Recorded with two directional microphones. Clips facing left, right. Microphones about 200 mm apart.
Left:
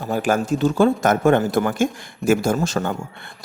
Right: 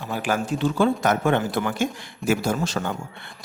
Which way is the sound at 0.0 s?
45° left (ahead or behind).